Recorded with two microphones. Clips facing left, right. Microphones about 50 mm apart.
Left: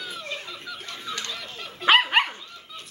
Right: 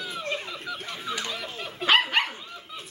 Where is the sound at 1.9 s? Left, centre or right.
Centre.